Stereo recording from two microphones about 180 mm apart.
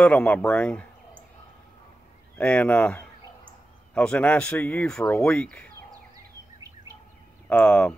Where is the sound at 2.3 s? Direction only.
5° left (ahead or behind).